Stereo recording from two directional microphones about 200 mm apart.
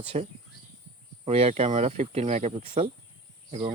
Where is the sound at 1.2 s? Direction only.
30° right (ahead or behind).